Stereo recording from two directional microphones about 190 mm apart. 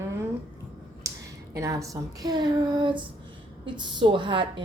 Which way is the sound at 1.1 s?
15° right (ahead or behind).